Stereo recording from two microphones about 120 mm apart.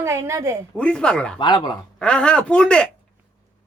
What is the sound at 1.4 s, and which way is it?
Speech, 40° left (ahead or behind).